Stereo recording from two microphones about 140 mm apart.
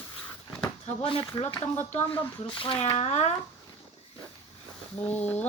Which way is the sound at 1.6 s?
50° left (ahead or behind).